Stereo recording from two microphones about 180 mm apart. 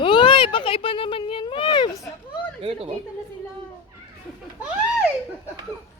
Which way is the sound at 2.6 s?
35° right (ahead or behind).